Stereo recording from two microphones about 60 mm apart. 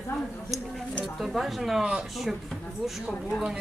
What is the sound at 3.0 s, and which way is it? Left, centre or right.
Speech, centre.